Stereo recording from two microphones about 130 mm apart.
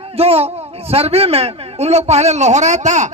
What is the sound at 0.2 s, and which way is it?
A man's voice, 50° right (ahead or behind).